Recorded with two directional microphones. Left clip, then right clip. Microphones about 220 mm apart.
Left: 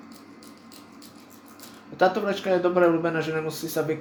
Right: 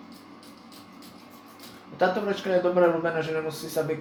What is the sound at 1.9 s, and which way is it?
A man's voice, 50° left (ahead or behind).